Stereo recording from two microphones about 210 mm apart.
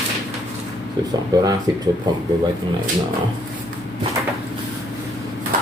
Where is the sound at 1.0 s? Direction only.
20° right (ahead or behind).